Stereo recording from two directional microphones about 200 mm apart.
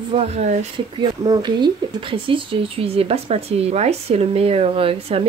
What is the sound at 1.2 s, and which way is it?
Speech, 20° right (ahead or behind).